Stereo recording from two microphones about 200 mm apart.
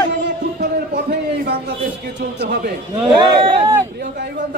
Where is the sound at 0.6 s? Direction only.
50° right (ahead or behind).